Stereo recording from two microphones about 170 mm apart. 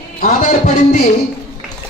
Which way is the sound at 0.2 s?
50° left (ahead or behind).